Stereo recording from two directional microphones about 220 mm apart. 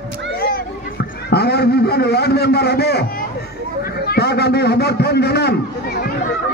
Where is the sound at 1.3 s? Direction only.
45° left (ahead or behind).